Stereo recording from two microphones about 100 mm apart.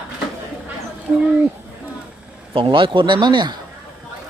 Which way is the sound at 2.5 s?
60° right (ahead or behind).